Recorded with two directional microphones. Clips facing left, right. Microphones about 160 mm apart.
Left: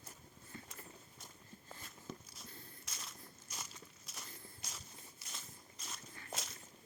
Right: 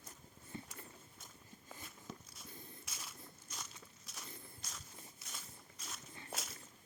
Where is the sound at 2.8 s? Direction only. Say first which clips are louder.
Even; 5° right (ahead or behind).